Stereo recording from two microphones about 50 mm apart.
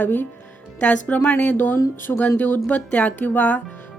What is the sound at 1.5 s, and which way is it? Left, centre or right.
Speech, left.